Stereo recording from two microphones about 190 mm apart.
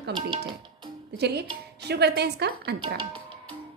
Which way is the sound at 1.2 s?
60° right (ahead or behind).